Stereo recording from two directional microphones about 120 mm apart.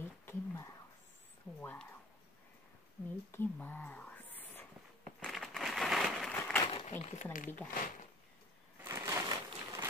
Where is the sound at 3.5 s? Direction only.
15° left (ahead or behind).